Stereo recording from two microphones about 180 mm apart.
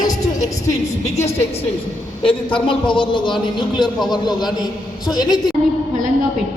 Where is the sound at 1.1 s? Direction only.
35° left (ahead or behind).